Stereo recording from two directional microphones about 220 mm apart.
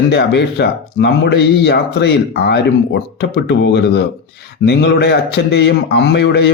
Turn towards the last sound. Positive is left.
turn(degrees=50)  # may be behind; listen again after turning